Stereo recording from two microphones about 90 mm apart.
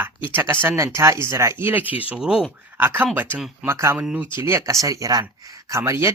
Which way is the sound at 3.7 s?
30° right (ahead or behind).